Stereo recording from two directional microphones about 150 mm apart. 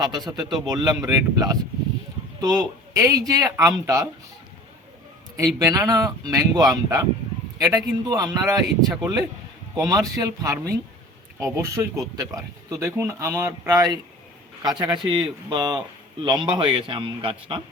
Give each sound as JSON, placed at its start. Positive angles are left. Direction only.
{"t": 0.3, "sound": "speech", "side_deg": -30}
{"t": 5.4, "sound": "a man's voice", "side_deg": -25}